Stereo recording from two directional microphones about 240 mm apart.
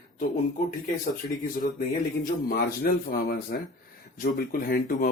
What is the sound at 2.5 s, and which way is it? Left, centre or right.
Speech, left.